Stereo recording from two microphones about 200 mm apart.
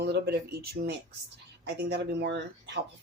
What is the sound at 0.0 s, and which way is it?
Speech, 55° right (ahead or behind).